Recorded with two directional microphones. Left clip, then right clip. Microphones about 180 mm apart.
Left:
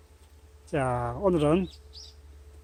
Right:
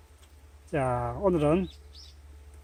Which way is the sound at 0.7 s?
10° left (ahead or behind).